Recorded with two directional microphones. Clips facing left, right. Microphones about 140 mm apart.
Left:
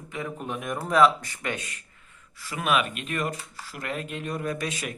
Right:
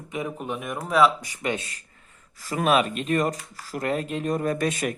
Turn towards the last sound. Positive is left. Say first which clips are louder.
# right 6 dB
turn(degrees=-50)  # may be behind; listen again after turning